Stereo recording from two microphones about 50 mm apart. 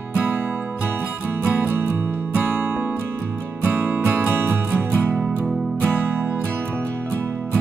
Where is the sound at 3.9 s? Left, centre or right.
Right.